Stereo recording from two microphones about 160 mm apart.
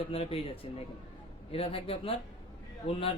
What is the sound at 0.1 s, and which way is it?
Speech, 35° left (ahead or behind).